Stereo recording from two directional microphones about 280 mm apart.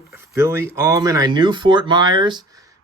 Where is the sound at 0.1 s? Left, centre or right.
Centre.